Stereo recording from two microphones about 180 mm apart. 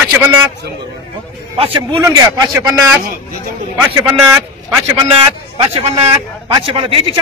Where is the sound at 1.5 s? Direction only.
30° right (ahead or behind).